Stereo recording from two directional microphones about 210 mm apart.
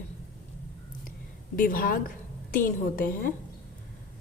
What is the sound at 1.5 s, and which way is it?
A woman's voice, 40° left (ahead or behind).